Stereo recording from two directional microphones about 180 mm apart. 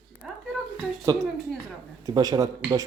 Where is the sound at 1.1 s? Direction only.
20° right (ahead or behind).